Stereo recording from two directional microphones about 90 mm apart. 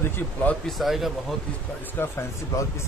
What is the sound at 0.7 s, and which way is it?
Speech, centre (ahead or behind).